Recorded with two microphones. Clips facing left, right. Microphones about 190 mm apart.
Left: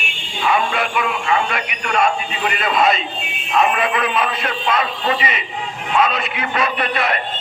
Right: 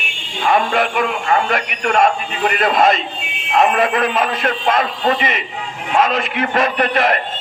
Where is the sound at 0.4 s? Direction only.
45° right (ahead or behind).